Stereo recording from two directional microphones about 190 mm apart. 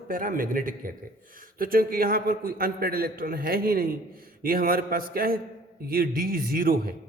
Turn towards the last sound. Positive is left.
turn(degrees=-50)  # may be behind; listen again after turning